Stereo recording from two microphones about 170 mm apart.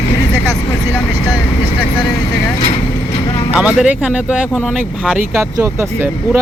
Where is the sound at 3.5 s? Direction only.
5° right (ahead or behind).